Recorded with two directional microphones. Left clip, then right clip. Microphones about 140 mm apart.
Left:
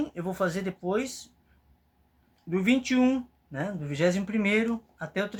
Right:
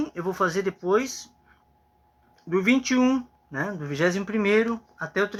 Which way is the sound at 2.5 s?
35° left (ahead or behind).